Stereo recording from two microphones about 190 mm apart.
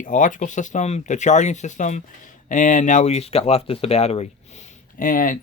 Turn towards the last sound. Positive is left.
turn(degrees=45)  # may be behind; listen again after turning